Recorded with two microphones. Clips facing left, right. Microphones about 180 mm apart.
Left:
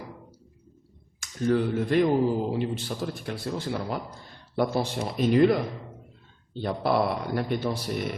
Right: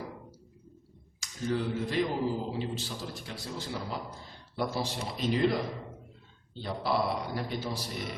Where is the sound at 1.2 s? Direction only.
55° left (ahead or behind).